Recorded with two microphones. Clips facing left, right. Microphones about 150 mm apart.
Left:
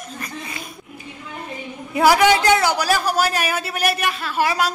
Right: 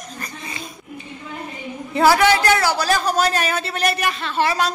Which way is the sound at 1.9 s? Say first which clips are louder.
Even; 15° left (ahead or behind).